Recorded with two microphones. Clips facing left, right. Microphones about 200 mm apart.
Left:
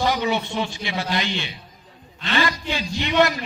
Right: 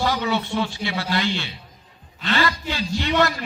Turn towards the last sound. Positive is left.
turn(degrees=15)  # may be behind; listen again after turning